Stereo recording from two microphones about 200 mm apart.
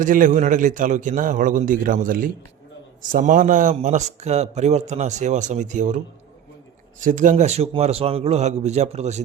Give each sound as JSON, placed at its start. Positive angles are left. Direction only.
{"t": 0.0, "sound": "a man's voice", "side_deg": -40}
{"t": 7.0, "sound": "a man's voice", "side_deg": -40}